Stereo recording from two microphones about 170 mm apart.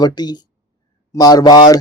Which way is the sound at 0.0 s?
25° left (ahead or behind).